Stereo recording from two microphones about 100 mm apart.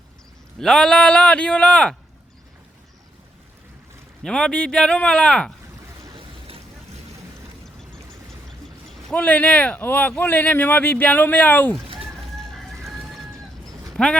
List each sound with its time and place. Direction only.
0.6 s speech: 5° left (ahead or behind)
4.2 s speech: 5° left (ahead or behind)
8.6 s a sound: 5° left (ahead or behind)
9.1 s speech: 15° left (ahead or behind)
12.5 s chicken: 5° left (ahead or behind)
13.9 s speech: 5° left (ahead or behind)